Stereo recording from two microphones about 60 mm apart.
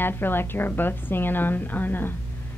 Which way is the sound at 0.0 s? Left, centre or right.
Left.